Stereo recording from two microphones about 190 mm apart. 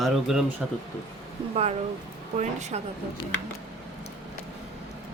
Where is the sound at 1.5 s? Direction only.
30° right (ahead or behind).